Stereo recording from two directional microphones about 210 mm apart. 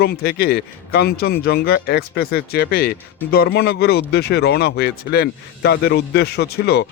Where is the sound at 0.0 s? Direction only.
50° left (ahead or behind).